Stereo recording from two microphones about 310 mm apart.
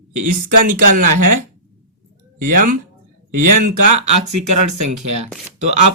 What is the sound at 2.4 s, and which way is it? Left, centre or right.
Speech, right.